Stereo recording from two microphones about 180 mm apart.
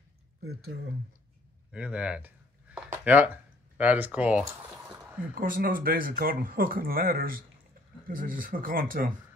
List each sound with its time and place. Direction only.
1.7 s speech: 5° right (ahead or behind)
5.3 s speech: 50° right (ahead or behind)